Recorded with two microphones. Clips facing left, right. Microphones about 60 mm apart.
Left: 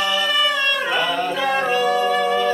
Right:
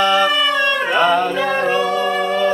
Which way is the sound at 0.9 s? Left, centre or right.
Right.